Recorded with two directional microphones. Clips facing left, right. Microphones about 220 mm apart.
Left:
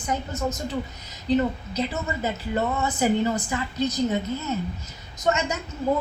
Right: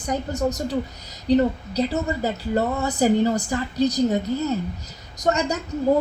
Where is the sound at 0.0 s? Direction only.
40° right (ahead or behind).